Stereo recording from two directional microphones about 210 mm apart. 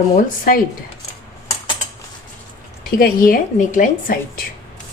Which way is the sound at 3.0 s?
45° left (ahead or behind).